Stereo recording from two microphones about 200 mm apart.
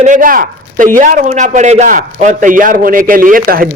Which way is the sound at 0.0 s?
40° right (ahead or behind).